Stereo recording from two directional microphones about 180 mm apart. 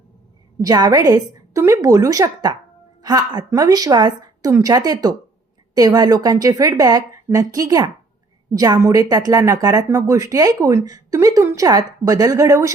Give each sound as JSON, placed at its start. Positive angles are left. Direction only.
{"t": 0.6, "sound": "speech", "side_deg": -20}